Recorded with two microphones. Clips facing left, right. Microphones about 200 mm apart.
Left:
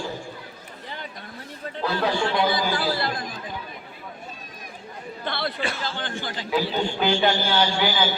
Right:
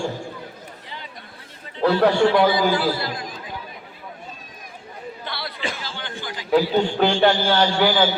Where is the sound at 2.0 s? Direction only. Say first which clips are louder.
Right 6 dB; 65° right (ahead or behind).